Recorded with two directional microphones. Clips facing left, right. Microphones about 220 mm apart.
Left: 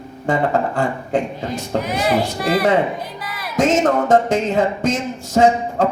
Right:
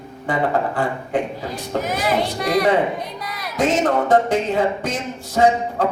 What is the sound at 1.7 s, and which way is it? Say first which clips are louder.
Speech: left 1 dB; 45° right (ahead or behind).